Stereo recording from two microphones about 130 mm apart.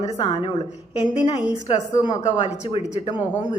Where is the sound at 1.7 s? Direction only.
35° left (ahead or behind).